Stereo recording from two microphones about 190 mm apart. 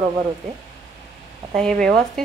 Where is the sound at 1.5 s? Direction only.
Centre (ahead or behind).